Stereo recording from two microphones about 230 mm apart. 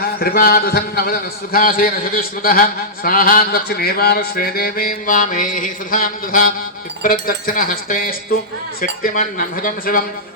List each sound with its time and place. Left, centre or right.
0.2 s a man's voice: left